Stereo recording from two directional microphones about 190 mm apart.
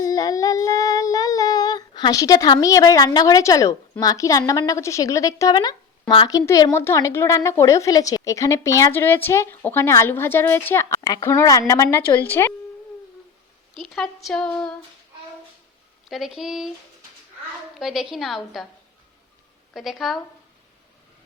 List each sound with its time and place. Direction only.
0.0 s child singing: 20° left (ahead or behind)
13.7 s speech: centre (ahead or behind)
16.0 s speech: centre (ahead or behind)
17.7 s speech: centre (ahead or behind)
19.7 s speech: centre (ahead or behind)